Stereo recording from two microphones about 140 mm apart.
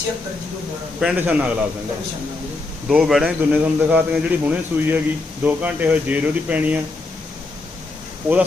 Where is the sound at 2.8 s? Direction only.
5° right (ahead or behind).